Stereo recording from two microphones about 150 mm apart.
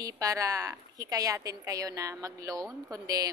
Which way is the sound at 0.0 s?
20° right (ahead or behind).